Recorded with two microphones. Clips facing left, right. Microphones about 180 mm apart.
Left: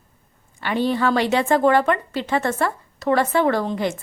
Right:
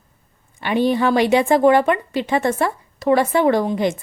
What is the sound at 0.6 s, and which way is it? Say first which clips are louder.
Speech: right 3 dB; 15° right (ahead or behind).